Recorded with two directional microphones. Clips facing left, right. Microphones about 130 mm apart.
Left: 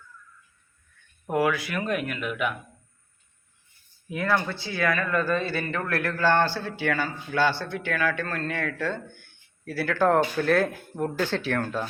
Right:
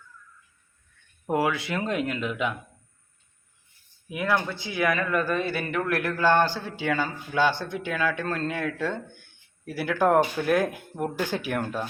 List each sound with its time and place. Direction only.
1.3 s speech: 25° right (ahead or behind)
4.1 s speech: 15° right (ahead or behind)